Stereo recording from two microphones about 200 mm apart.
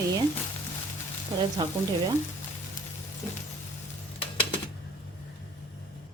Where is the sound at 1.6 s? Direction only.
20° right (ahead or behind).